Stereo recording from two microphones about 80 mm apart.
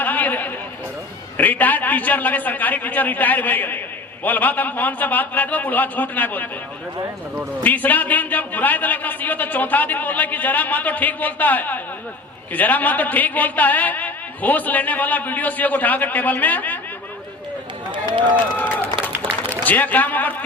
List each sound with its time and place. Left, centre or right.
0.0 s a sound: left
1.4 s speech: left
7.6 s speech: left
17.9 s speech: right
19.6 s speech: left